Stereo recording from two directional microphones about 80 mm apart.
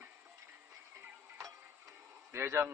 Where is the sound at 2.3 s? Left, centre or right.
Right.